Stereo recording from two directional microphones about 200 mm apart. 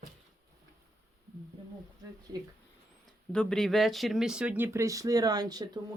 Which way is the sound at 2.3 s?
20° right (ahead or behind).